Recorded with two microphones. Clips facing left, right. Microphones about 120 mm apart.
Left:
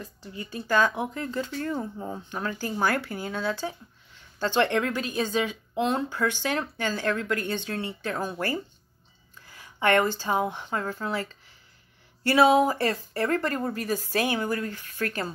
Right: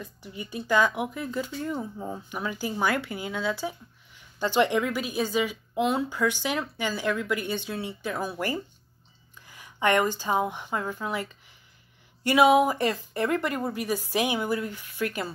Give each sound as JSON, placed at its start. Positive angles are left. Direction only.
{"t": 0.2, "sound": "speech", "side_deg": -15}
{"t": 2.2, "sound": "speech", "side_deg": -10}